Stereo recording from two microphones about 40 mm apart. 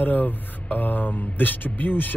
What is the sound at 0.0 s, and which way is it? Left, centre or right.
Speech, left.